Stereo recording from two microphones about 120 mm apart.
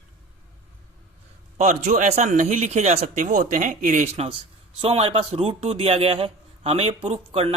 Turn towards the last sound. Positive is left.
turn(degrees=-55)  # may be behind; listen again after turning